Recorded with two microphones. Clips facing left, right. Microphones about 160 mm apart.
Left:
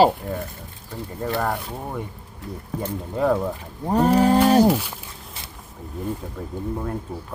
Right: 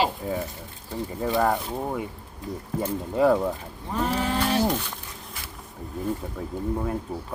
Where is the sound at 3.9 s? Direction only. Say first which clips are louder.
Left 9 dB; 45° left (ahead or behind).